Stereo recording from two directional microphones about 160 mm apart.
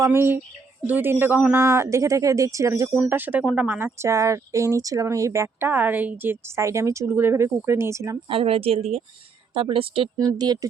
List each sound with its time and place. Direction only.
0.0 s speech: 15° right (ahead or behind)
8.3 s a woman's voice: 35° right (ahead or behind)
10.2 s speech: 25° right (ahead or behind)